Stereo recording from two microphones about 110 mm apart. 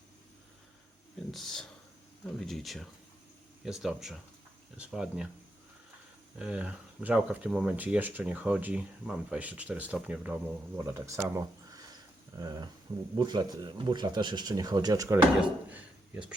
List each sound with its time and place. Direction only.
1.3 s speech: centre (ahead or behind)
6.4 s speech: 10° right (ahead or behind)
10.8 s speech: 25° right (ahead or behind)
15.4 s speech: 10° right (ahead or behind)